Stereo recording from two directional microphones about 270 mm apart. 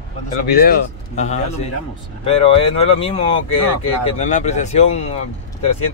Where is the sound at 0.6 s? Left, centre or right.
Left.